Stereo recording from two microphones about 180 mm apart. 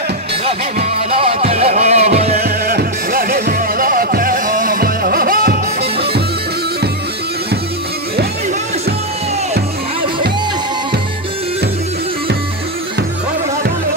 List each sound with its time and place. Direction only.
1.1 s music: 30° right (ahead or behind)
2.3 s music: 55° right (ahead or behind)